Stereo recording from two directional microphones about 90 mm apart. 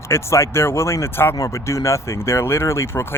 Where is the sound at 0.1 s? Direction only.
30° left (ahead or behind).